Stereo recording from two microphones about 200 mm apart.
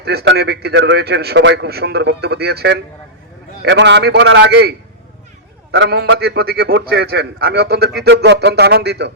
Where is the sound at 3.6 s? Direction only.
60° right (ahead or behind).